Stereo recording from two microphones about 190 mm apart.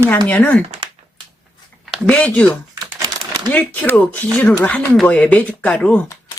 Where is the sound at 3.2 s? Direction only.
25° right (ahead or behind).